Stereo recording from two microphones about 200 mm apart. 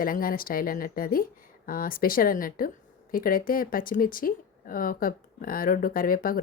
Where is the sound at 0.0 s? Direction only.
45° left (ahead or behind).